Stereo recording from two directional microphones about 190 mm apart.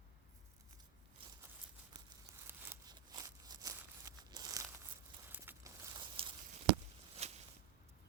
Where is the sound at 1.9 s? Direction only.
15° right (ahead or behind); by 7.4 s 35° right (ahead or behind).